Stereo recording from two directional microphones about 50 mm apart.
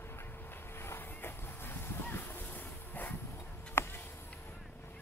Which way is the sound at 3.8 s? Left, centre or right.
Left.